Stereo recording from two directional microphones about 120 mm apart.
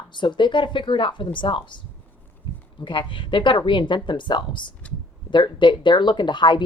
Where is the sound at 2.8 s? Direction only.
45° left (ahead or behind).